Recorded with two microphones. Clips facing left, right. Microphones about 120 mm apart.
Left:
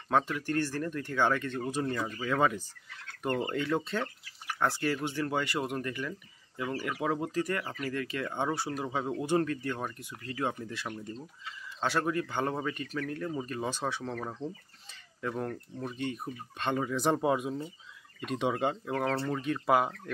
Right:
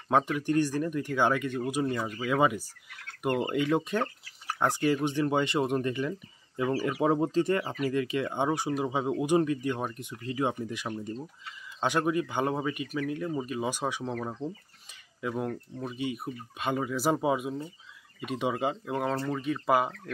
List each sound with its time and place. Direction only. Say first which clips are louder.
0.1 s speech: right 3 dB; 15° right (ahead or behind)
15.2 s speech: right 2 dB; 10° right (ahead or behind)